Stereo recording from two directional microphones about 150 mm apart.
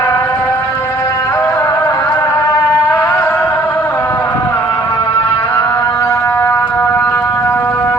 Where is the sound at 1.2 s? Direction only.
20° left (ahead or behind).